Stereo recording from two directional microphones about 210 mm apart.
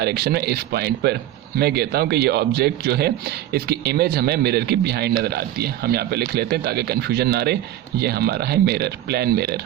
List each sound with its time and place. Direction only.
0.0 s speech: 50° right (ahead or behind)